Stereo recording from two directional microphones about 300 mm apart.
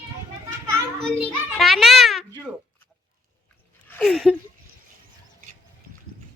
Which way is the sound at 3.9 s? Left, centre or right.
Centre.